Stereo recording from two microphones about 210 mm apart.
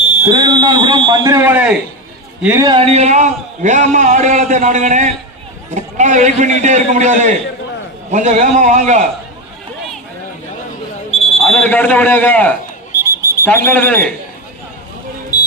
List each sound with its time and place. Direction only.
0.3 s a man's voice: 20° right (ahead or behind)
2.6 s a man's voice: 30° right (ahead or behind)
11.1 s a sound: 30° left (ahead or behind)
11.3 s speech: 5° left (ahead or behind)
12.9 s a sound: 10° right (ahead or behind)
13.7 s a man's voice: 10° left (ahead or behind)